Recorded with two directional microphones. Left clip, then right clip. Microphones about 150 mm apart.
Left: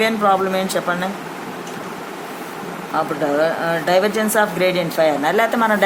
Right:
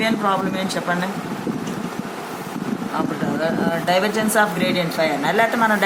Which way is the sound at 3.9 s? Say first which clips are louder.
Left 3 dB; 45° left (ahead or behind).